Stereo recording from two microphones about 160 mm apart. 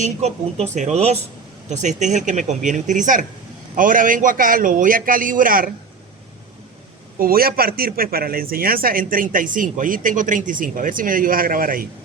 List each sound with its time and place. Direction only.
0.0 s a man's voice: 45° right (ahead or behind); by 5.7 s 60° right (ahead or behind)
7.2 s a man's voice: 65° right (ahead or behind)